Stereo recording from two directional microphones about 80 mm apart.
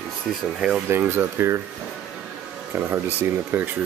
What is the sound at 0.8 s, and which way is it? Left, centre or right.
Speech, right.